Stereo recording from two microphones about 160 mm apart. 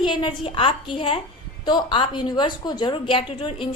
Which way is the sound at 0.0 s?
30° left (ahead or behind).